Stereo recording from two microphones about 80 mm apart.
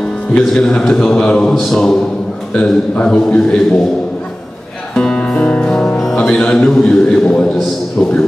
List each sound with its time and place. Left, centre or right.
0.4 s a man's voice: centre
1.5 s a sound: centre
2.5 s a man's voice: centre
4.9 s music: centre
5.9 s a man's voice: centre
8.0 s a man's voice: left